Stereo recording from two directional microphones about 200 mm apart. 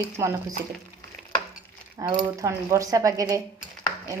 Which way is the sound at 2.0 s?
15° right (ahead or behind).